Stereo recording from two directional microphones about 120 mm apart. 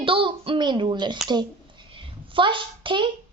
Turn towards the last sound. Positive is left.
turn(degrees=-45)  # may be behind; listen again after turning